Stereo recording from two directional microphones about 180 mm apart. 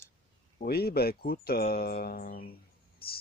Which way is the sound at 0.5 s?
60° left (ahead or behind).